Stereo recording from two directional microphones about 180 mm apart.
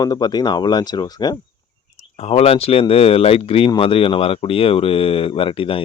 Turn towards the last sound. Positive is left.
turn(degrees=30)  # may be behind; listen again after turning